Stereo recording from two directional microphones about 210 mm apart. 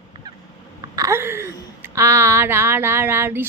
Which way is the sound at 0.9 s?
15° right (ahead or behind).